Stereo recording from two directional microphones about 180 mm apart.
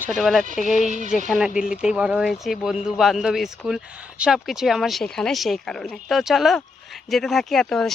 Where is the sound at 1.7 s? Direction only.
5° right (ahead or behind).